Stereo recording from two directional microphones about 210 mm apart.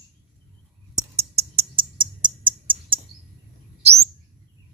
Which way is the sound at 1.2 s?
30° right (ahead or behind).